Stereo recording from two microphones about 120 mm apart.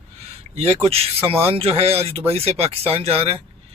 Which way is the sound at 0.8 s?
55° right (ahead or behind).